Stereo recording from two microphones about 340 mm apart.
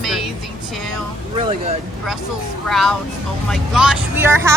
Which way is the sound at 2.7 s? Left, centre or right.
Centre.